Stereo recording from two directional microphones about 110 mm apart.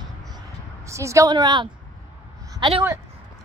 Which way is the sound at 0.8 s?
25° right (ahead or behind).